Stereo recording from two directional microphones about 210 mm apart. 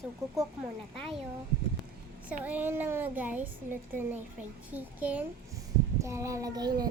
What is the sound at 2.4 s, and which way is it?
Speech, 10° right (ahead or behind).